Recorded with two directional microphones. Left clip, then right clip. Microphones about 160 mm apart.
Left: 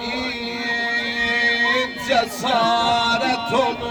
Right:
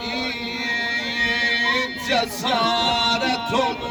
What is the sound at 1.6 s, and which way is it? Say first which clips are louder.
Music: left 2 dB; 15° left (ahead or behind).